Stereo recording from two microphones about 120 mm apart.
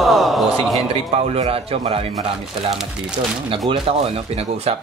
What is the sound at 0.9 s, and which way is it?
Speech, 70° right (ahead or behind).